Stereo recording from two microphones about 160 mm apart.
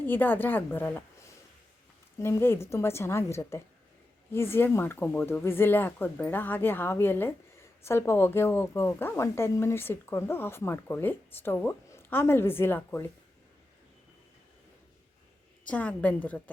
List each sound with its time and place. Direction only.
0.0 s speech: 10° left (ahead or behind)
2.1 s speech: 15° left (ahead or behind)
15.6 s speech: 10° left (ahead or behind)